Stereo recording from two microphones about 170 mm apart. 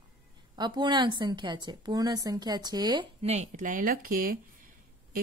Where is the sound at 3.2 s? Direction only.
40° right (ahead or behind); by 4.4 s 55° right (ahead or behind).